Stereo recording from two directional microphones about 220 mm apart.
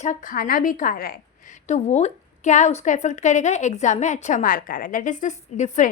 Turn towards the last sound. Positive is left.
turn(degrees=35)  # may be behind; listen again after turning